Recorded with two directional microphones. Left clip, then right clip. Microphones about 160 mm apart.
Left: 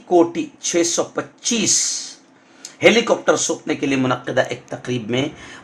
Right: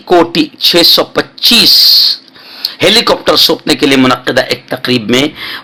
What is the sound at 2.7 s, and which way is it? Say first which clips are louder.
Speech: right 6 dB; 45° right (ahead or behind).